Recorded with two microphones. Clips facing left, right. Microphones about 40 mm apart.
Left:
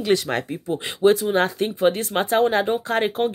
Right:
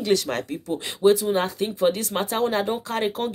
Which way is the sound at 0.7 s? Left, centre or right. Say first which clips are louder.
Left 1 dB; left.